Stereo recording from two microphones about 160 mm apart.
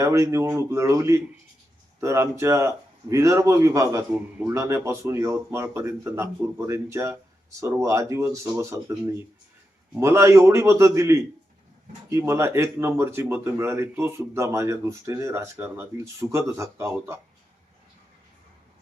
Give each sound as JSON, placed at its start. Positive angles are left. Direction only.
{"t": 0.0, "sound": "a man's voice", "side_deg": -20}